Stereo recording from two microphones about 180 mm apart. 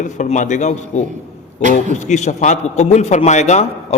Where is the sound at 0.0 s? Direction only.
40° left (ahead or behind).